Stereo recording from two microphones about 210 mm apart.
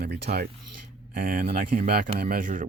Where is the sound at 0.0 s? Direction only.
50° right (ahead or behind).